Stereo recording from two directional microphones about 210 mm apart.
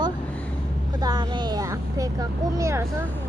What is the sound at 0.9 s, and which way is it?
Speech, 20° right (ahead or behind).